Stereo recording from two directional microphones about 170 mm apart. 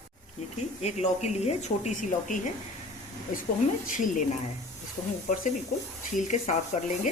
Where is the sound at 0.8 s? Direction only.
40° left (ahead or behind).